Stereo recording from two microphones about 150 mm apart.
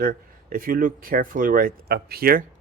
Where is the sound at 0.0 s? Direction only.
70° right (ahead or behind).